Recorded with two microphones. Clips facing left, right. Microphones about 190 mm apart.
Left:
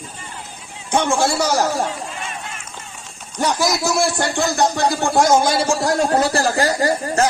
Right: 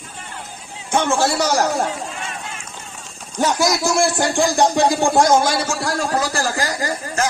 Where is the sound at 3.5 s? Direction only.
Centre (ahead or behind).